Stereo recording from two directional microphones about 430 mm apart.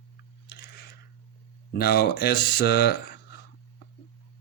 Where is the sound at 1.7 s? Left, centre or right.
Left.